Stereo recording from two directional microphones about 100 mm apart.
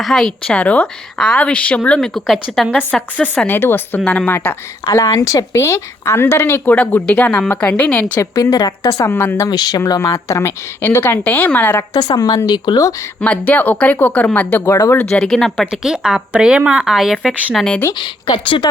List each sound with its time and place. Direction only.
0.0 s a woman's voice: centre (ahead or behind)
2.9 s a woman's voice: 15° left (ahead or behind)
4.9 s speech: 35° left (ahead or behind); by 8.2 s 15° left (ahead or behind)
8.2 s speech: 40° left (ahead or behind)
9.5 s speech: 45° left (ahead or behind)
10.0 s speech: 30° left (ahead or behind)
11.9 s speech: 40° left (ahead or behind)
13.2 s a woman's voice: 15° left (ahead or behind)
15.1 s speech: 5° left (ahead or behind)
17.9 s speech: 50° left (ahead or behind)